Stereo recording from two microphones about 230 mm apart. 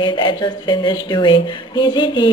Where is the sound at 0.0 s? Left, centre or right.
Centre.